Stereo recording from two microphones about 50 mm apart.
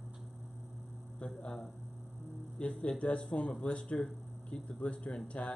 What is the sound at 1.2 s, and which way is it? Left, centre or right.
Speech, centre.